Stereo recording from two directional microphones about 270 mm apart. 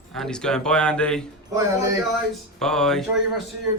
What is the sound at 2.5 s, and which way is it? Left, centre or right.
Speech, centre.